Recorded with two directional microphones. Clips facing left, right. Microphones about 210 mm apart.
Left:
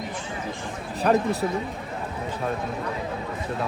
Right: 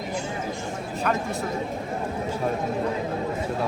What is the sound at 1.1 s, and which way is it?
Speech, 35° left (ahead or behind).